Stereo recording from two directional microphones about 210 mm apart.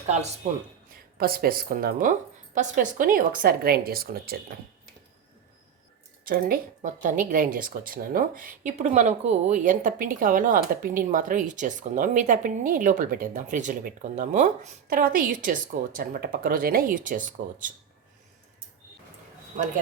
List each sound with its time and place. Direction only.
1.2 s a woman's voice: 45° right (ahead or behind)
6.2 s a woman's voice: 45° right (ahead or behind)